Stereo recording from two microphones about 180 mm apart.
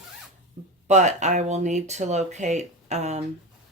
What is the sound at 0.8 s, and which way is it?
Speech, 40° right (ahead or behind).